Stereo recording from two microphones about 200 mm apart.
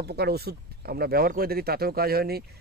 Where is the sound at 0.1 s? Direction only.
55° right (ahead or behind).